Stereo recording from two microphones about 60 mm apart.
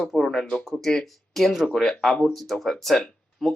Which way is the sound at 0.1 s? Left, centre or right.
Centre.